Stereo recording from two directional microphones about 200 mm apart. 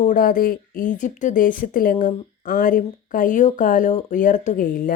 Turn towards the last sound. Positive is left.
turn(degrees=45)  # may be behind; listen again after turning